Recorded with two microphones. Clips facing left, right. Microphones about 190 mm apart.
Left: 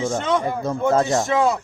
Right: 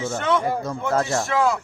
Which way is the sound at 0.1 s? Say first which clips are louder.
Left 1 dB; 20° left (ahead or behind).